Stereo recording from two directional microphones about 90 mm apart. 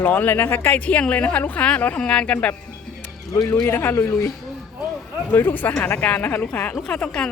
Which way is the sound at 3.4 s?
45° left (ahead or behind).